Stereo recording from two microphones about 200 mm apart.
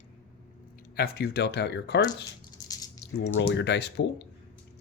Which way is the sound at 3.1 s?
60° left (ahead or behind).